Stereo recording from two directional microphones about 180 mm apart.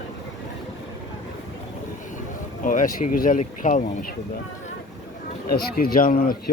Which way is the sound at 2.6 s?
45° left (ahead or behind).